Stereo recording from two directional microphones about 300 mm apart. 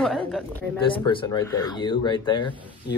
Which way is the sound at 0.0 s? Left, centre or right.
Centre.